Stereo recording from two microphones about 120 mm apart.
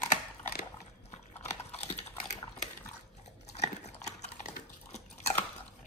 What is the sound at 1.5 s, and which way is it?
Typing, 70° left (ahead or behind).